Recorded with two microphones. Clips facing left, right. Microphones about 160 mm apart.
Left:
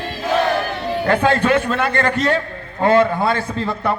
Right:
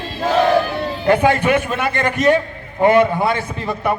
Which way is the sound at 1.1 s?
15° right (ahead or behind).